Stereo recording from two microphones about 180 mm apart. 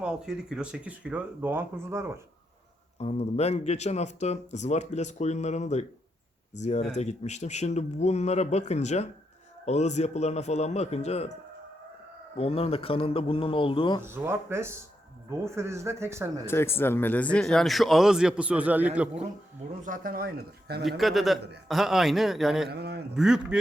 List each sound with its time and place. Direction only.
0.0 s speech: 5° right (ahead or behind)
3.0 s speech: 35° left (ahead or behind)
12.4 s speech: 35° left (ahead or behind)
14.0 s speech: 15° right (ahead or behind)
16.5 s a man's voice: 15° left (ahead or behind); by 19.0 s 10° right (ahead or behind)
19.8 s speech: 50° right (ahead or behind)
21.0 s a man's voice: centre (ahead or behind)
22.7 s a man's voice: 65° right (ahead or behind)
23.1 s a man's voice: 5° right (ahead or behind)